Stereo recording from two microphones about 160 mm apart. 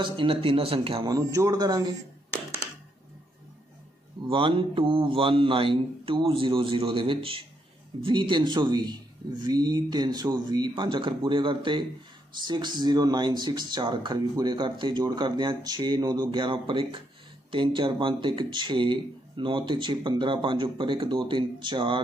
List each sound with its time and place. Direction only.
0.0 s speech: 30° right (ahead or behind)
1.0 s speech: 20° right (ahead or behind)
4.3 s speech: 30° right (ahead or behind)